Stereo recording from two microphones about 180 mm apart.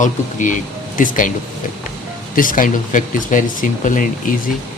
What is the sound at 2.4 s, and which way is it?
Speech, 50° left (ahead or behind).